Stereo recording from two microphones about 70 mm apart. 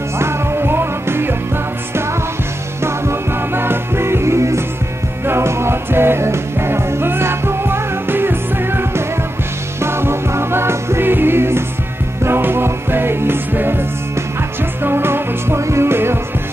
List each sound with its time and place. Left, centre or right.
0.2 s music: right
2.8 s music: right